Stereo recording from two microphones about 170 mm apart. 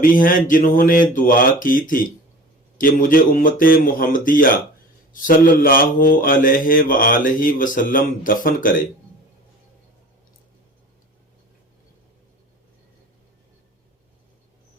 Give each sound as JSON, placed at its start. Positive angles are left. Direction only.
{"t": 0.0, "sound": "speech", "side_deg": 55}
{"t": 2.7, "sound": "mantra", "side_deg": 55}